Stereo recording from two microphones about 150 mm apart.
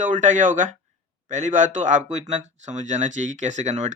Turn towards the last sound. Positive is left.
turn(degrees=-50)  # may be behind; listen again after turning